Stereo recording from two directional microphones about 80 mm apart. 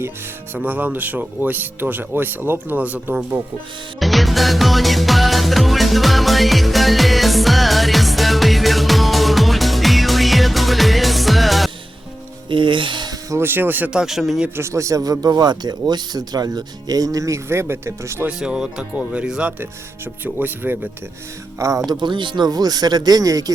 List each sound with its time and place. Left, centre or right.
0.5 s speech: right
4.0 s music: centre
12.5 s speech: right
13.3 s speech: right
13.9 s speech: centre
14.5 s speech: right
18.3 s speech: centre
20.2 s speech: right
21.6 s speech: right
21.8 s speech: right
22.4 s speech: right